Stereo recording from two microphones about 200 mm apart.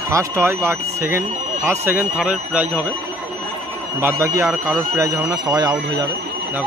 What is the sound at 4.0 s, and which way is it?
Speech, 15° right (ahead or behind).